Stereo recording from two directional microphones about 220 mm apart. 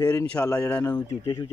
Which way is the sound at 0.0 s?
10° left (ahead or behind).